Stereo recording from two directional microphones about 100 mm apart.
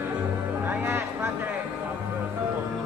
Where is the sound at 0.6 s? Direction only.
20° right (ahead or behind).